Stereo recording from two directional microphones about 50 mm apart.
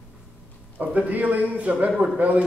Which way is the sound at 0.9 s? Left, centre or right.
Right.